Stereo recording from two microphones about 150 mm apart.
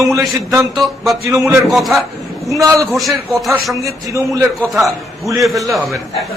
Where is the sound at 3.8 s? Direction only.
20° right (ahead or behind).